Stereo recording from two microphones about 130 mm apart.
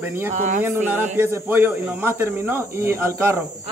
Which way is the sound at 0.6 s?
15° right (ahead or behind).